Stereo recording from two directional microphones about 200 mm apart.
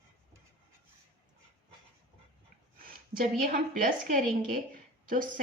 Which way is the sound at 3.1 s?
45° right (ahead or behind).